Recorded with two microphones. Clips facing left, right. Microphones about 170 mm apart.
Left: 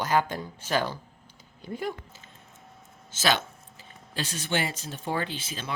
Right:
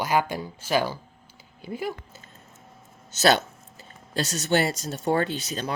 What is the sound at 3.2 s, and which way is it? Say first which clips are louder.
Speech: right 6 dB; 40° right (ahead or behind).